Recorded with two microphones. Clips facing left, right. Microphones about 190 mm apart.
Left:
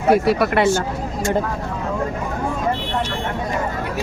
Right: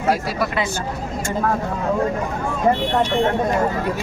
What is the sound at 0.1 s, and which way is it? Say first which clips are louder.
Speech: left 6 dB; 60° left (ahead or behind).